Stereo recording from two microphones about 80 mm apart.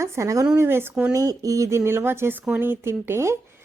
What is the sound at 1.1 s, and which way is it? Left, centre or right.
A woman's voice, right.